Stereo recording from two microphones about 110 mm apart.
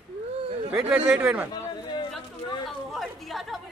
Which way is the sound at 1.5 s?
45° left (ahead or behind).